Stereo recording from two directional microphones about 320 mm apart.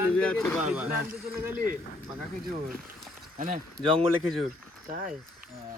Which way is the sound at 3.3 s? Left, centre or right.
Right.